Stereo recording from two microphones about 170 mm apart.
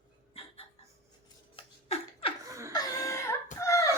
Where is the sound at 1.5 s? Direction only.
35° left (ahead or behind).